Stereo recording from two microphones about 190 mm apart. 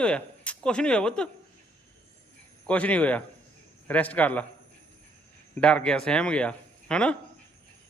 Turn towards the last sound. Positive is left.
turn(degrees=5)  # may be behind; listen again after turning